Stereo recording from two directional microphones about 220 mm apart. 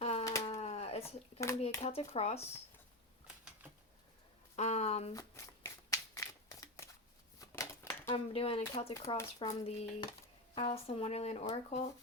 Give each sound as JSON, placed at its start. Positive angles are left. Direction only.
{"t": 0.0, "sound": "a sound", "side_deg": 30}
{"t": 1.6, "sound": "speech", "side_deg": 25}
{"t": 4.5, "sound": "speech", "side_deg": 30}
{"t": 5.1, "sound": "a sound", "side_deg": 15}
{"t": 8.1, "sound": "speech", "side_deg": 25}
{"t": 8.9, "sound": "speech", "side_deg": 15}